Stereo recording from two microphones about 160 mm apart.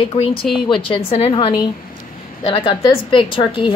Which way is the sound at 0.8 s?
35° left (ahead or behind).